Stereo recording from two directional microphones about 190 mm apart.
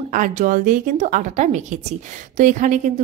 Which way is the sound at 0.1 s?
45° right (ahead or behind).